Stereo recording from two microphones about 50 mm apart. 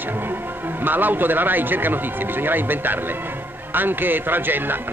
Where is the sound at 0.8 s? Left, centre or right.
Right.